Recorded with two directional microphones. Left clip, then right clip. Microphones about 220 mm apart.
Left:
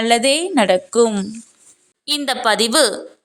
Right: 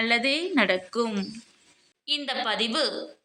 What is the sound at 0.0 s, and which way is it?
A woman's voice, 45° left (ahead or behind).